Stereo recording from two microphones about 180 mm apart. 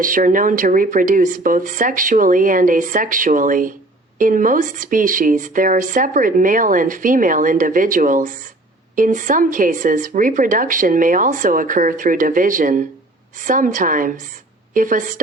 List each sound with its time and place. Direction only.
0.0 s speech: 50° right (ahead or behind)